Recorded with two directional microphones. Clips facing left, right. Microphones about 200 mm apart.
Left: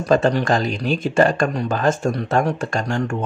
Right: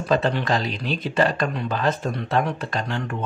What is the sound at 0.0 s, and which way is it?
Speech, 40° left (ahead or behind).